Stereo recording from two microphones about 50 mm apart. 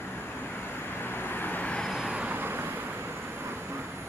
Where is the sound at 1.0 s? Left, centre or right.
Left.